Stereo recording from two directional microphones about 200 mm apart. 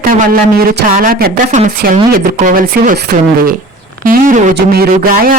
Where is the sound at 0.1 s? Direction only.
45° right (ahead or behind).